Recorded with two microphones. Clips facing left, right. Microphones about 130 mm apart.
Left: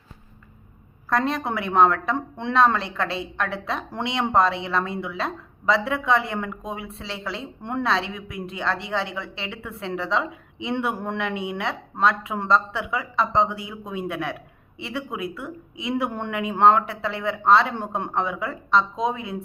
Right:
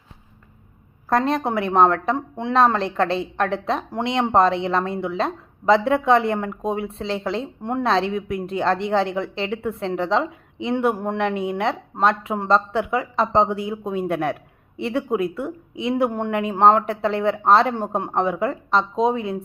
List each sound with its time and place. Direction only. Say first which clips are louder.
1.1 s a woman's voice: right 4 dB; 30° right (ahead or behind)
2.1 s speech: right 2 dB; 15° right (ahead or behind)
2.6 s a woman's voice: right 4 dB; 35° right (ahead or behind)